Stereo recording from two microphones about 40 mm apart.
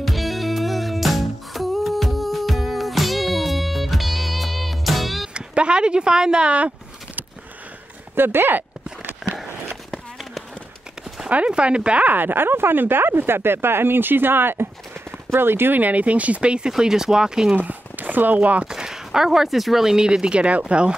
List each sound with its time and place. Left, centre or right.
0.0 s music: centre
5.3 s speech: right
8.1 s a sound: right
11.2 s speech: right
12.1 s speech: right
15.7 s speech: right
16.7 s speech: centre
17.6 s chopping: right
18.4 s speech: right
18.7 s speech: centre